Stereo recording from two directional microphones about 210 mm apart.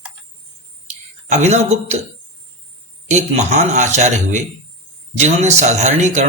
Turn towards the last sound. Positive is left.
turn(degrees=-35)  # may be behind; listen again after turning